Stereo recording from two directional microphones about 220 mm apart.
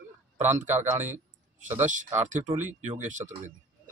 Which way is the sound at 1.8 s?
35° right (ahead or behind).